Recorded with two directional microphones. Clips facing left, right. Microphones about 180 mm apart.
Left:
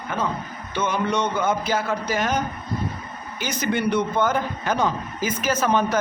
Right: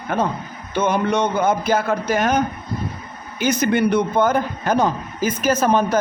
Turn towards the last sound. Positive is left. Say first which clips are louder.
# right 4 dB
turn(degrees=-40)  # may be behind; listen again after turning